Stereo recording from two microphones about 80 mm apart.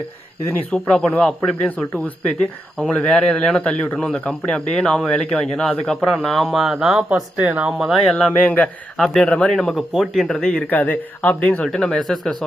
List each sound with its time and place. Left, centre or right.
0.7 s speech: centre
2.9 s speech: centre
7.1 s speech: centre
7.8 s speech: centre
8.4 s speech: centre
9.0 s a man's voice: centre
9.2 s speech: centre
10.4 s speech: centre
11.7 s speech: centre